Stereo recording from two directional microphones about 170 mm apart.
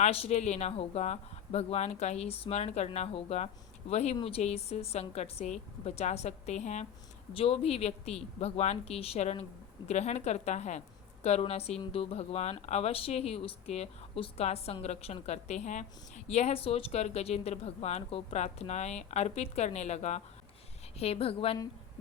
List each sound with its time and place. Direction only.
0.0 s a woman's voice: 40° left (ahead or behind)